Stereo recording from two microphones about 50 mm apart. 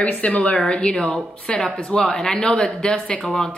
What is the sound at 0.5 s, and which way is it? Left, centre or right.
Speech, centre.